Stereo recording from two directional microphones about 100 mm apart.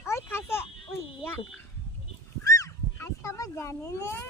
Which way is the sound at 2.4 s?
35° left (ahead or behind).